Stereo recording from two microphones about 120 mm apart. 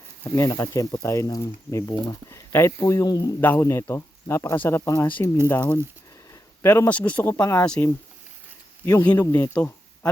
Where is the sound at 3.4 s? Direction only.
15° left (ahead or behind).